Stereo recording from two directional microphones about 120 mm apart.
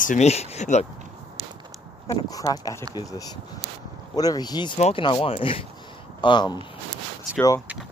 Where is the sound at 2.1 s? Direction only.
30° left (ahead or behind).